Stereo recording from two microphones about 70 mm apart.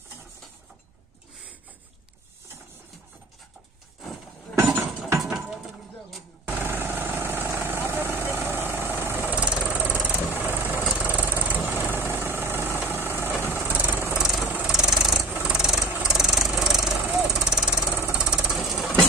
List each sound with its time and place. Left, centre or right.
4.6 s a sound: right
5.2 s a sound: centre
6.4 s vehicle: right
9.3 s vehicle: centre
10.3 s vehicle: right
10.8 s vehicle: centre
14.1 s engine: centre
14.7 s a sound: centre
15.4 s vehicle: centre
18.1 s jackhammer: centre